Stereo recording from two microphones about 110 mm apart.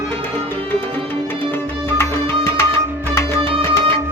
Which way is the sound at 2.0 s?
25° left (ahead or behind).